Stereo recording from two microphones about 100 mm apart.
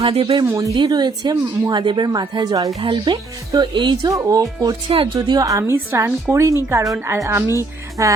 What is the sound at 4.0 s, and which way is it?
Speech, 35° right (ahead or behind).